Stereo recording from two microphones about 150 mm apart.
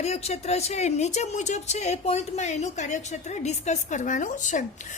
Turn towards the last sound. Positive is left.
turn(degrees=55)  # may be behind; listen again after turning